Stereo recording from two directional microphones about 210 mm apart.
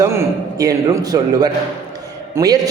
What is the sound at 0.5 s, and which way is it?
A man's voice, 15° right (ahead or behind).